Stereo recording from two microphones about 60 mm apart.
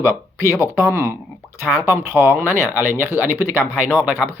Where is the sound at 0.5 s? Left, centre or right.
Right.